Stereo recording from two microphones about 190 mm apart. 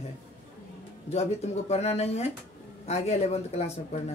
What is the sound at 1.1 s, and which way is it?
A woman's voice, 35° left (ahead or behind).